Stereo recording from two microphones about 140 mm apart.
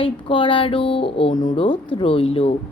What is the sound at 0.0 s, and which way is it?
A woman's voice, 40° left (ahead or behind).